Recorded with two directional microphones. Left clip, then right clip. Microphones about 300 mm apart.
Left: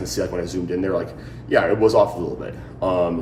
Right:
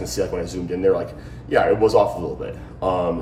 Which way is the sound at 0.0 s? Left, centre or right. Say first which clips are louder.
Even; centre.